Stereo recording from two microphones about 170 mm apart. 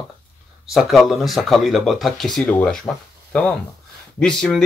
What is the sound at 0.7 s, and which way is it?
A man's voice, centre (ahead or behind).